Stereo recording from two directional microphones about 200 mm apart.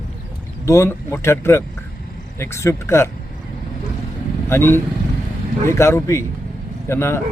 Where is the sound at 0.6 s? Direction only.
15° left (ahead or behind).